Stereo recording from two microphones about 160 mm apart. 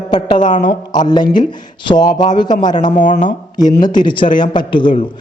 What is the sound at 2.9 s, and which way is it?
Speech, 50° left (ahead or behind).